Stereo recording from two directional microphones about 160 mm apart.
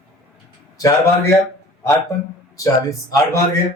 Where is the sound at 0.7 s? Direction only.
20° left (ahead or behind).